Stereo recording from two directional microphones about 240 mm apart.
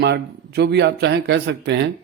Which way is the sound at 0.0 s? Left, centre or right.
Right.